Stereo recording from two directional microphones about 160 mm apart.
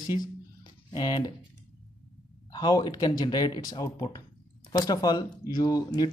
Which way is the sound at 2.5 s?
25° left (ahead or behind).